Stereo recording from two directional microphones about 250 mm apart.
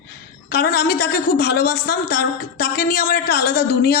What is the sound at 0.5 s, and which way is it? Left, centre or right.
A woman's voice, left.